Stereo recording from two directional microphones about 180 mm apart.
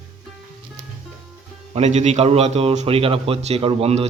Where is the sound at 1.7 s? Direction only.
40° right (ahead or behind).